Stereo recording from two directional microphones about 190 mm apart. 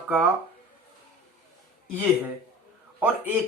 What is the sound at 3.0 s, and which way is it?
Speech, 10° right (ahead or behind).